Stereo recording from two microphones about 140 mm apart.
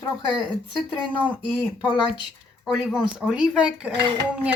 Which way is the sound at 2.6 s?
Centre (ahead or behind).